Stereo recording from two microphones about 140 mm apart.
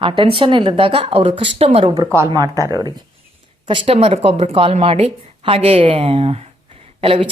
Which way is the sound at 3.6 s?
40° right (ahead or behind).